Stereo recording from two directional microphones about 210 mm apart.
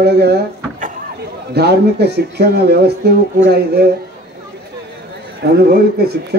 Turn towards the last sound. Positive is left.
turn(degrees=-50)  # may be behind; listen again after turning